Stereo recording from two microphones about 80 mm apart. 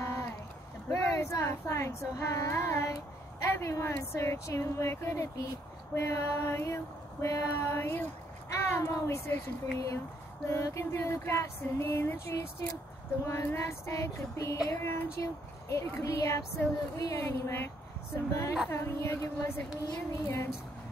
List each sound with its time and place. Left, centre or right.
0.8 s female singing: left